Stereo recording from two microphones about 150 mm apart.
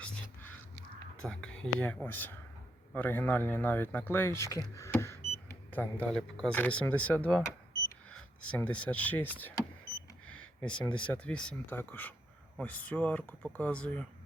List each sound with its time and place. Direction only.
0.0 s crow: 10° left (ahead or behind)
1.3 s speech: 5° left (ahead or behind)
4.7 s power windows: 20° left (ahead or behind)
5.5 s speech: 10° left (ahead or behind)